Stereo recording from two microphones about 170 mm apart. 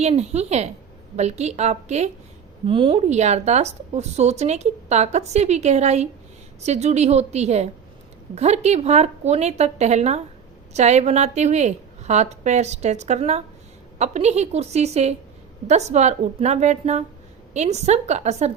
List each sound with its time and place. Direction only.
0.0 s speech: 40° right (ahead or behind)